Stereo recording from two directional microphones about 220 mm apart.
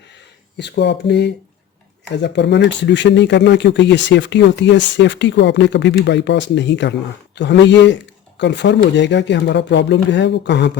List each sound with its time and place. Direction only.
0.5 s speech: 50° left (ahead or behind)